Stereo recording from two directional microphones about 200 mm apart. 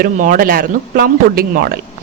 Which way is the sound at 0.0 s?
40° right (ahead or behind).